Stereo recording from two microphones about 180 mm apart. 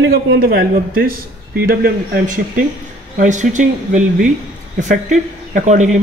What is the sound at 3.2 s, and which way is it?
Speech, 45° right (ahead or behind).